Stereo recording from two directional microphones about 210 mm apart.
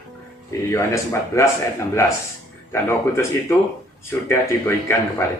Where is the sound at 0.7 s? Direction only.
15° left (ahead or behind).